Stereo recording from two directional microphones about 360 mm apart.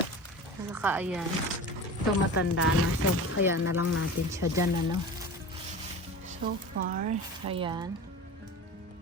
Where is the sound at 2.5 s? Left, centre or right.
Left.